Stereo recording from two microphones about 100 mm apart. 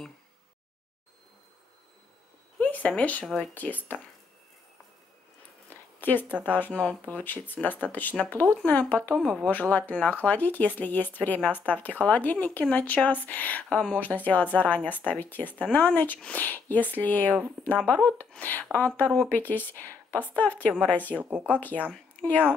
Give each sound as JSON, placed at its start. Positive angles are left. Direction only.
{"t": 2.6, "sound": "speech", "side_deg": 15}
{"t": 5.7, "sound": "zipper", "side_deg": 20}
{"t": 6.5, "sound": "speech", "side_deg": 15}
{"t": 9.1, "sound": "speech", "side_deg": 5}
{"t": 9.5, "sound": "speech", "side_deg": 15}
{"t": 21.2, "sound": "speech", "side_deg": -15}